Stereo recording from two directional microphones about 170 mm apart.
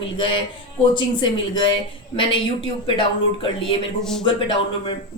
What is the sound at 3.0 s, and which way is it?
Speech, 30° left (ahead or behind).